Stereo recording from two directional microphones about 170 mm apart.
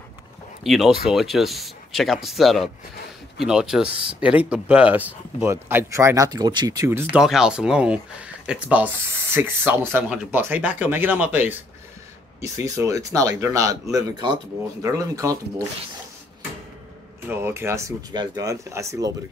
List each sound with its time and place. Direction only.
0.7 s speech: centre (ahead or behind)
7.2 s speech: 5° right (ahead or behind); by 15.3 s 20° right (ahead or behind)
17.3 s speech: 15° right (ahead or behind)